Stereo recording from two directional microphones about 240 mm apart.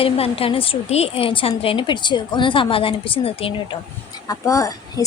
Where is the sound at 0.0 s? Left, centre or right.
Left.